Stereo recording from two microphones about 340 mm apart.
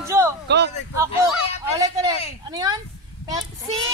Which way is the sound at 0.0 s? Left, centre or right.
Centre.